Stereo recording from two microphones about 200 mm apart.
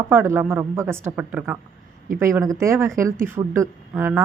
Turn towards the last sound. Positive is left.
turn(degrees=-10)  # may be behind; listen again after turning